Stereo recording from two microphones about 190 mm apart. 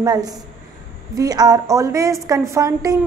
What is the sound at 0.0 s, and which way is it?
A woman's voice, 20° right (ahead or behind).